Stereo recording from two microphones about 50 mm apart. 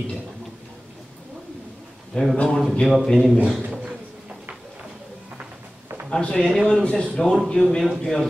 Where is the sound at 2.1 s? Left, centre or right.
Centre.